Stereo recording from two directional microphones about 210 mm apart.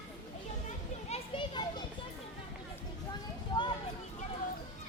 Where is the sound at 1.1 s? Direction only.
25° left (ahead or behind).